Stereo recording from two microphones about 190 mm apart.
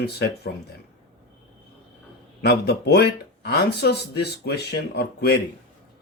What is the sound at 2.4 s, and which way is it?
Speech, 55° left (ahead or behind).